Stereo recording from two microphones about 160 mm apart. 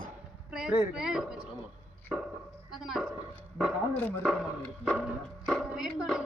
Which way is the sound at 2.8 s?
Centre (ahead or behind).